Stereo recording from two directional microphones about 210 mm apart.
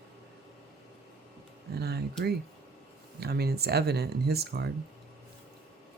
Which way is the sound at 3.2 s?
50° right (ahead or behind).